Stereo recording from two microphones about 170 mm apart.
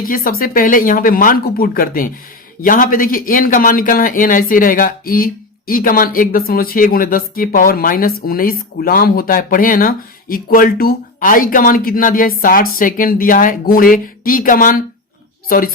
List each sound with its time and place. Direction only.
0.0 s speech: 55° left (ahead or behind)